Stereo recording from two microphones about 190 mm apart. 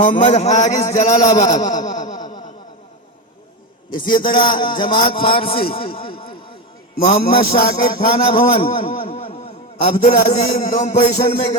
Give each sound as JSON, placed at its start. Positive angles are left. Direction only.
{"t": 0.0, "sound": "speech", "side_deg": 40}
{"t": 0.9, "sound": "a man's voice", "side_deg": 15}
{"t": 1.4, "sound": "speech", "side_deg": 40}
{"t": 1.7, "sound": "a sound", "side_deg": 40}
{"t": 2.1, "sound": "a sound", "side_deg": 20}
{"t": 3.9, "sound": "a man's voice", "side_deg": 25}